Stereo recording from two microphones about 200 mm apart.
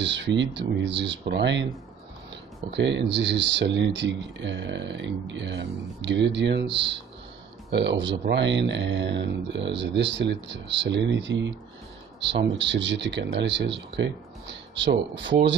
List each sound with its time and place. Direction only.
0.0 s speech: 60° right (ahead or behind)
2.7 s speech: 60° right (ahead or behind)